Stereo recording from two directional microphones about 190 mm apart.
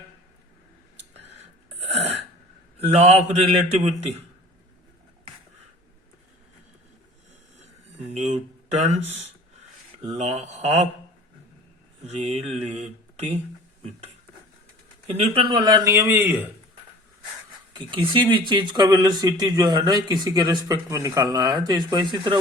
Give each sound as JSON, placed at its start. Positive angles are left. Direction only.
{"t": 2.8, "sound": "speech", "side_deg": -35}
{"t": 8.1, "sound": "a sound", "side_deg": -35}
{"t": 10.0, "sound": "speech", "side_deg": -35}
{"t": 12.0, "sound": "speech", "side_deg": -35}
{"t": 15.4, "sound": "a man's voice", "side_deg": -25}
{"t": 17.7, "sound": "speech", "side_deg": -25}